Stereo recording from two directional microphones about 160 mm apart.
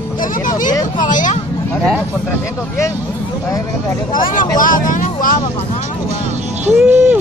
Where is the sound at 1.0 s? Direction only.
55° left (ahead or behind).